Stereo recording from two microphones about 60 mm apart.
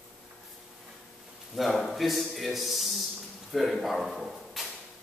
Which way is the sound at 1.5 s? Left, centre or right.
Centre.